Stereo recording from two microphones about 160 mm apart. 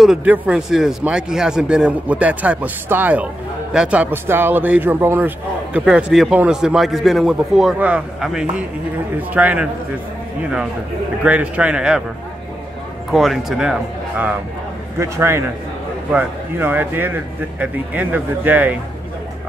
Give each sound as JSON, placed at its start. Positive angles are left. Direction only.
{"t": 0.0, "sound": "a man's voice", "side_deg": -5}
{"t": 13.1, "sound": "a man's voice", "side_deg": 0}